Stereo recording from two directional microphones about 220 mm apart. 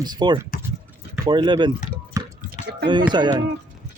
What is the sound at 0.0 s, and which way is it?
Speech, 20° right (ahead or behind).